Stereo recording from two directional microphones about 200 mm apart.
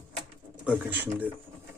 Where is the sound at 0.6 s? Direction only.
10° right (ahead or behind).